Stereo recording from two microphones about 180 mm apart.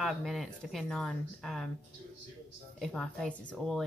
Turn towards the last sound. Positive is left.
turn(degrees=5)  # may be behind; listen again after turning